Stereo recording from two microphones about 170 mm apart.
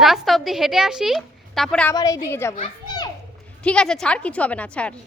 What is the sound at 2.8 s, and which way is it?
Children playing, 25° left (ahead or behind).